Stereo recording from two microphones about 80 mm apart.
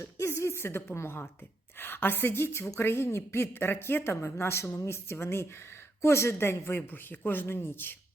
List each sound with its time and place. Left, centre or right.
0.0 s a woman's voice: left